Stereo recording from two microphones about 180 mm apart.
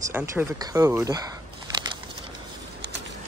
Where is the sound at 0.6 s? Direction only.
20° right (ahead or behind).